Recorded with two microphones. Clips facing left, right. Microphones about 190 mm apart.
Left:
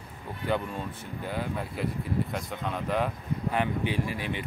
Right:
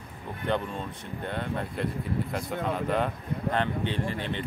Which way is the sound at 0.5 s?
5° left (ahead or behind).